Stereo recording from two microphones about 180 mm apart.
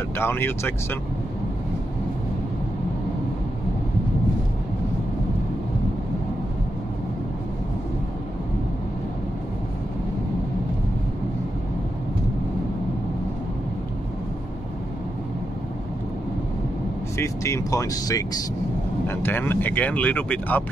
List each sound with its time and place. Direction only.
0.2 s speech: 10° left (ahead or behind)
17.2 s speech: 15° left (ahead or behind)